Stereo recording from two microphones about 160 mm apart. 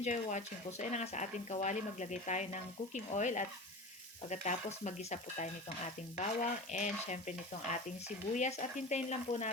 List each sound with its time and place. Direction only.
0.0 s speech: 50° left (ahead or behind)